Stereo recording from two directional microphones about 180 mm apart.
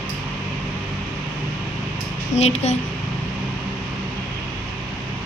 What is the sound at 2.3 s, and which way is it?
Speech, 40° left (ahead or behind).